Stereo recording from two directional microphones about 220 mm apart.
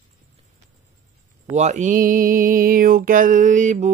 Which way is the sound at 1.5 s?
30° right (ahead or behind).